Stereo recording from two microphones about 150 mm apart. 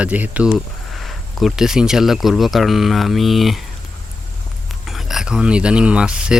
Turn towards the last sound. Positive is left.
turn(degrees=-5)  # may be behind; listen again after turning